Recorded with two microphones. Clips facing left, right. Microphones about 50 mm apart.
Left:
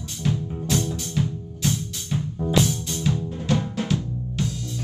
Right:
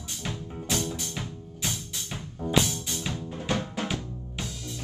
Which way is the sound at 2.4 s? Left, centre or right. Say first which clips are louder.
Left 3 dB; centre.